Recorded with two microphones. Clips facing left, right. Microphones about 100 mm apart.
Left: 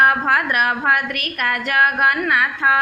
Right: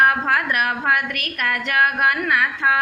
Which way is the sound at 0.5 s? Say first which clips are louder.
Left 2 dB; 5° left (ahead or behind).